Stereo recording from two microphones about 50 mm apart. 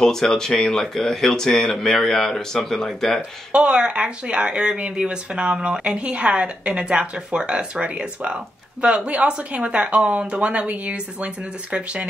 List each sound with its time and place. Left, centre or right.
0.0 s speech: centre
3.2 s speech: right